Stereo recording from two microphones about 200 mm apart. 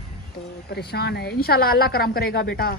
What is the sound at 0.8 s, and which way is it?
A woman's voice, 55° left (ahead or behind).